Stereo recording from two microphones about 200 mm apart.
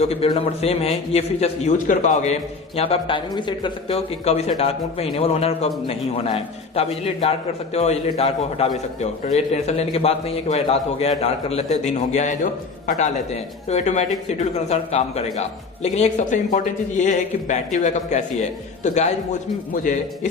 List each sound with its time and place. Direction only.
0.1 s a man's voice: 30° left (ahead or behind)